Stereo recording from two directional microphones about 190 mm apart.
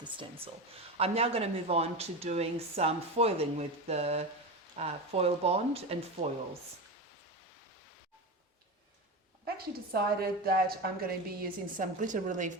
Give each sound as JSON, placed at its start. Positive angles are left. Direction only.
{"t": 0.0, "sound": "speech", "side_deg": -25}
{"t": 9.6, "sound": "a woman's voice", "side_deg": -55}